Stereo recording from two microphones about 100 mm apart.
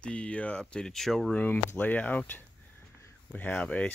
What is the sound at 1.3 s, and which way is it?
Speech, 20° left (ahead or behind).